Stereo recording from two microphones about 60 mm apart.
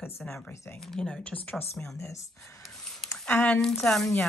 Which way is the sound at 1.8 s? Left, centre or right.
Left.